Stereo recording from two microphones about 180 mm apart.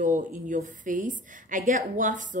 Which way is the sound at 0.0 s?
45° right (ahead or behind).